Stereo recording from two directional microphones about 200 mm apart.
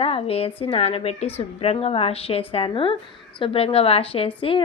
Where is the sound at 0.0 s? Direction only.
30° left (ahead or behind).